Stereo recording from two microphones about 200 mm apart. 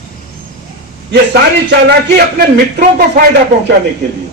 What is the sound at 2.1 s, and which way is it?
Speech, 55° right (ahead or behind).